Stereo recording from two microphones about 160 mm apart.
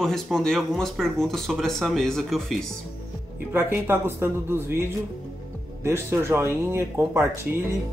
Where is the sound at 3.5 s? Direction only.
15° right (ahead or behind).